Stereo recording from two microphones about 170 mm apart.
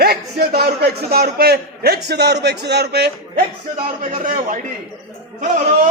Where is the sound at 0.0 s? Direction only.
70° right (ahead or behind).